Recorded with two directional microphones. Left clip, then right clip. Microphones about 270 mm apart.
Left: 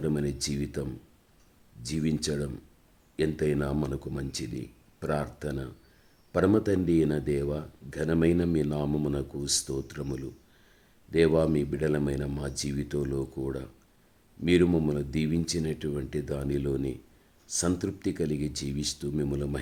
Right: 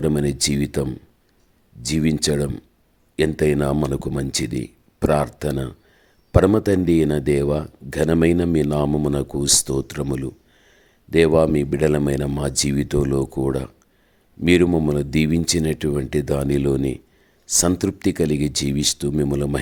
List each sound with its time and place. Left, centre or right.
0.0 s speech: right